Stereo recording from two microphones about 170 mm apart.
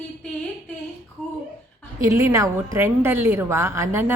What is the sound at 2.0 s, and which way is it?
A woman's voice, 20° right (ahead or behind).